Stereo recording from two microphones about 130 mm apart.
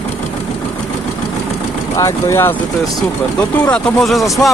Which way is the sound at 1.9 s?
20° left (ahead or behind).